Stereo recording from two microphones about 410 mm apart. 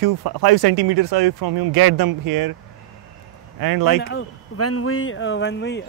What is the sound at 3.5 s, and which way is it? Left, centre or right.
Speech, right.